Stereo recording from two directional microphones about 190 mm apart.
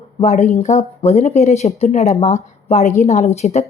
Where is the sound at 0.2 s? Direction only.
35° left (ahead or behind).